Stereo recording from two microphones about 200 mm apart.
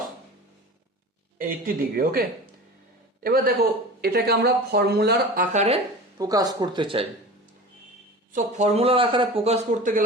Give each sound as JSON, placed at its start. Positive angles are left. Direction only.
{"t": 1.4, "sound": "speech", "side_deg": -45}
{"t": 3.2, "sound": "speech", "side_deg": -50}
{"t": 5.5, "sound": "speech", "side_deg": -30}
{"t": 6.1, "sound": "speech", "side_deg": -20}
{"t": 8.3, "sound": "speech", "side_deg": -40}